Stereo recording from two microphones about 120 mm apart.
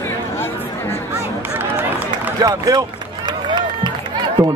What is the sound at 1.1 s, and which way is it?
Run, 20° right (ahead or behind).